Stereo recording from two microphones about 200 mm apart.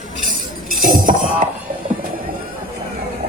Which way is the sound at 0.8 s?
45° right (ahead or behind).